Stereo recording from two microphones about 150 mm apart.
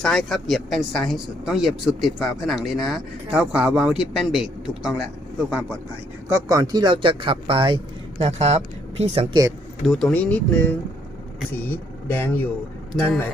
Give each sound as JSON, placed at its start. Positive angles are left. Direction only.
{"t": 0.0, "sound": "speech", "side_deg": 0}
{"t": 6.2, "sound": "speech", "side_deg": -20}
{"t": 8.2, "sound": "speech", "side_deg": -45}
{"t": 9.8, "sound": "speech", "side_deg": 0}